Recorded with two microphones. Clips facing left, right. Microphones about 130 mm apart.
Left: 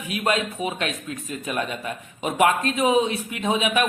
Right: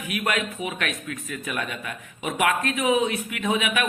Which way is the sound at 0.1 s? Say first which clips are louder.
Left 3 dB; 30° left (ahead or behind).